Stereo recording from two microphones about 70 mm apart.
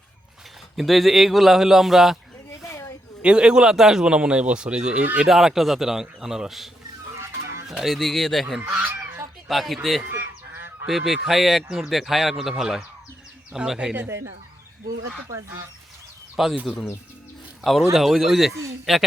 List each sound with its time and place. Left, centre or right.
0.8 s speech: centre
2.6 s a sound: left
3.2 s a man's voice: centre
7.7 s speech: centre
8.6 s goose: right
9.5 s speech: centre
10.0 s goose: right
10.8 s a man's voice: centre
13.9 s speech: right
16.3 s speech: centre
17.6 s speech: centre